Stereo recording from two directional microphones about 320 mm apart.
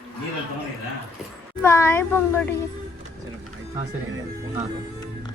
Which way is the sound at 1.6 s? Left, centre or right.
Centre.